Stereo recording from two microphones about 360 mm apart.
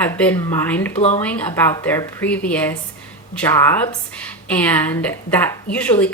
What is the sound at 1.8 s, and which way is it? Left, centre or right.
A woman's voice, centre.